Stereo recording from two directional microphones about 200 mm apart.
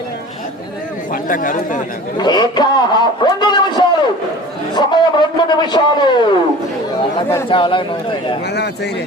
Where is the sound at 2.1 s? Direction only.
20° left (ahead or behind).